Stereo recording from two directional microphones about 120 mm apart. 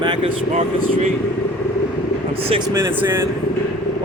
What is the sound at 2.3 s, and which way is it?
Speech, 50° right (ahead or behind).